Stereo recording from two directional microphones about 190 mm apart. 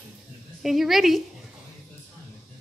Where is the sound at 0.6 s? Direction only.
Centre (ahead or behind).